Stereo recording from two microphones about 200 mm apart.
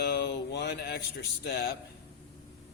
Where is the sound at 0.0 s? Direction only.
60° left (ahead or behind).